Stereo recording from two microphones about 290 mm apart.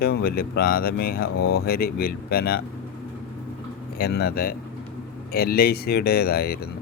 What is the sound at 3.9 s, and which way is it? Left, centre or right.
Speech, left.